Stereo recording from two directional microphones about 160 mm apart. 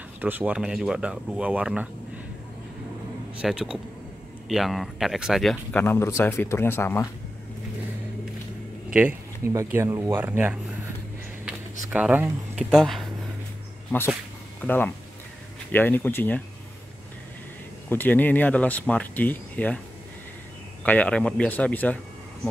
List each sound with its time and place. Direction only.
0.2 s speech: 10° right (ahead or behind)
3.3 s speech: 5° right (ahead or behind); by 7.1 s 15° left (ahead or behind)
8.9 s a sound: 10° right (ahead or behind)
9.8 s speech: 15° right (ahead or behind)
11.9 s speech: 10° right (ahead or behind)
14.6 s speech: 10° left (ahead or behind)
17.8 s speech: 10° left (ahead or behind)
20.8 s speech: 10° left (ahead or behind)